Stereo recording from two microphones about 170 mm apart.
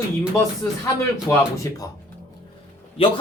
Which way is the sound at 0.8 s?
20° left (ahead or behind).